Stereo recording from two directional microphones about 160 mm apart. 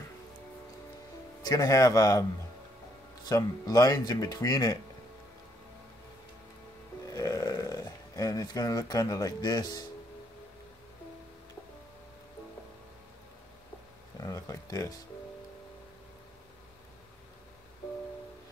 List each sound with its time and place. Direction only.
1.4 s speech: 25° left (ahead or behind)
3.3 s speech: 25° left (ahead or behind)
7.1 s a sound: 25° left (ahead or behind)
14.2 s speech: 20° left (ahead or behind)